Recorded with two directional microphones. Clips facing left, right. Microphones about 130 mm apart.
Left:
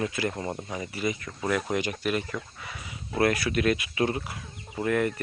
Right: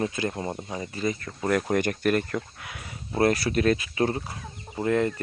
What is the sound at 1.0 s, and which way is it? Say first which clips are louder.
Speech: right 2 dB; 40° right (ahead or behind).